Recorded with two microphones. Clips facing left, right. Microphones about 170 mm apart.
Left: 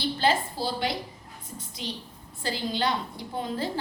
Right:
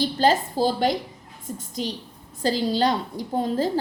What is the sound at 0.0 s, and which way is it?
A woman's voice, 40° right (ahead or behind).